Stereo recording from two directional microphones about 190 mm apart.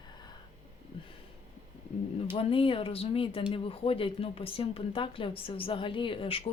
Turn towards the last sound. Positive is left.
turn(degrees=30)  # may be behind; listen again after turning